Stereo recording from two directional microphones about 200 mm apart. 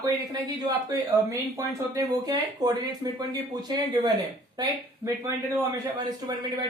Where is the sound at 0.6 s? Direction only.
20° right (ahead or behind).